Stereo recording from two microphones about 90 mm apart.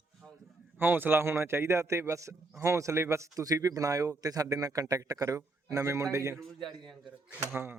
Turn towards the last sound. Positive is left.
turn(degrees=-20)  # may be behind; listen again after turning